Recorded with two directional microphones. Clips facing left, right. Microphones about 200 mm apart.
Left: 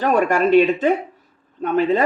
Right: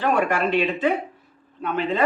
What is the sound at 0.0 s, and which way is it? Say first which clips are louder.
Speech: left 4 dB; 45° left (ahead or behind).